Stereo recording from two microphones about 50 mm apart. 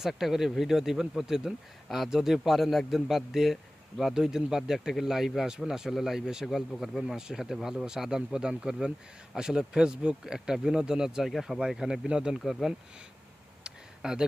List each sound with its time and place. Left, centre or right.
0.0 s speech: centre
12.4 s speech: centre
13.7 s a sound: centre